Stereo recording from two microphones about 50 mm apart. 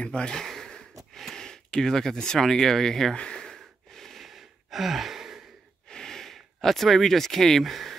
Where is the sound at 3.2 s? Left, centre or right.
Centre.